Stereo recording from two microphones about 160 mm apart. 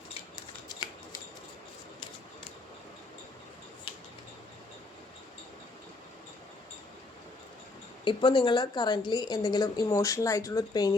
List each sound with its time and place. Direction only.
8.0 s a woman's voice: 30° left (ahead or behind)